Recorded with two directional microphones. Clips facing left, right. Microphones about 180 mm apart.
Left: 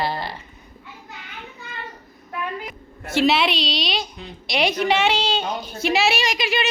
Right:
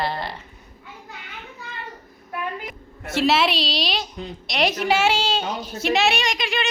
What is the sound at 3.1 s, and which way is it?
A woman's voice, centre (ahead or behind).